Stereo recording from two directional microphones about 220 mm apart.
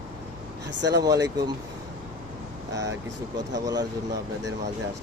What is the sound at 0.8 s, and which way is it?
Speech, 50° right (ahead or behind).